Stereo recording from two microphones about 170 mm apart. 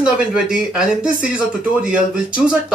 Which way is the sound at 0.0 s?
5° right (ahead or behind).